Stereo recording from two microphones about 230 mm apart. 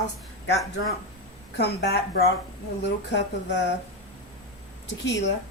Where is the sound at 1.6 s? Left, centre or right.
Left.